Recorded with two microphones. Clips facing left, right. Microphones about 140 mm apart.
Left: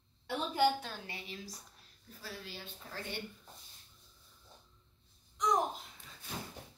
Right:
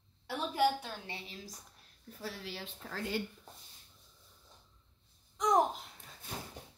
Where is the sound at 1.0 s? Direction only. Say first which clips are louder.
Even; 30° right (ahead or behind).